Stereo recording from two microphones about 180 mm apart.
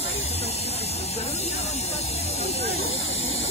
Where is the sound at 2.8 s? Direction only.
90° left.